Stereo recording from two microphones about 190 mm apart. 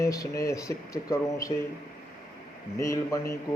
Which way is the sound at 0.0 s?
15° left (ahead or behind).